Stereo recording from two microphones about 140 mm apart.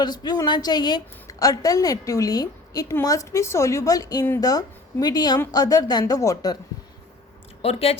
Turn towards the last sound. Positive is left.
turn(degrees=45)  # may be behind; listen again after turning